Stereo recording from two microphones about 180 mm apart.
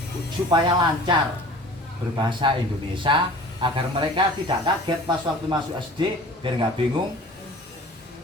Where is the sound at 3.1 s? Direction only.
25° right (ahead or behind).